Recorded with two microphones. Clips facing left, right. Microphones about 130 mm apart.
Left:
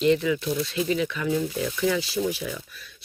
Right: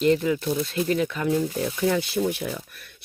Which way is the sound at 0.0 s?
45° right (ahead or behind).